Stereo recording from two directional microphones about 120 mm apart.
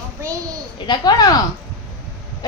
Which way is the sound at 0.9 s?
35° left (ahead or behind).